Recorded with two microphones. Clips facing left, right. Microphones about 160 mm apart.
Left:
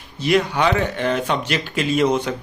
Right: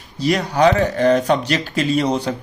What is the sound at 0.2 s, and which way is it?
Speech, 40° right (ahead or behind).